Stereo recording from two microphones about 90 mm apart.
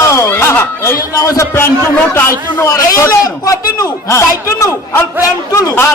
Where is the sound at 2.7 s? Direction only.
40° left (ahead or behind).